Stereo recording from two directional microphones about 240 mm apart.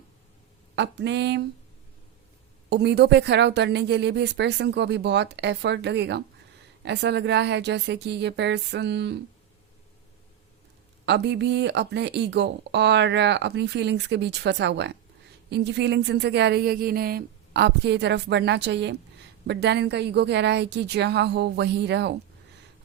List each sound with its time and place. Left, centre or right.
0.8 s speech: right
2.6 s speech: right
11.0 s speech: right